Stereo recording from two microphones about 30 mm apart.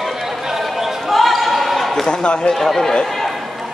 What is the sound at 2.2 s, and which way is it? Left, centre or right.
Speech, left.